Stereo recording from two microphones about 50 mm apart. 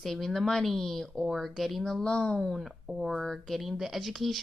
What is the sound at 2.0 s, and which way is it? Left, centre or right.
Speech, centre.